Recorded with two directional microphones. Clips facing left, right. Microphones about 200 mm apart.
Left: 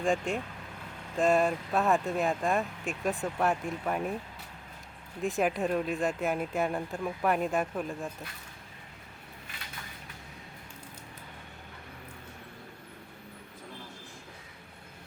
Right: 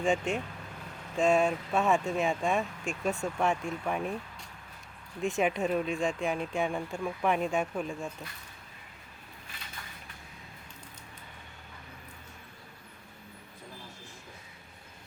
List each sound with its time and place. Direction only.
0.0 s speech: centre (ahead or behind)
5.2 s speech: centre (ahead or behind)